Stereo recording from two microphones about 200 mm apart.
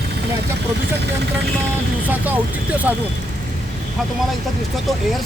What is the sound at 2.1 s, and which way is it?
Speech, 10° right (ahead or behind).